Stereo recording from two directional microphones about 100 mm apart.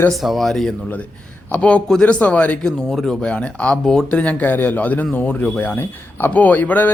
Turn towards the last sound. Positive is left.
turn(degrees=20)  # may be behind; listen again after turning